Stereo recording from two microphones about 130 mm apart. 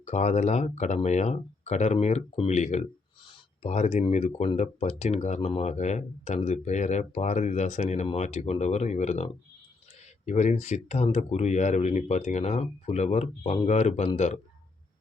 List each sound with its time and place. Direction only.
0.0 s speech: 60° left (ahead or behind)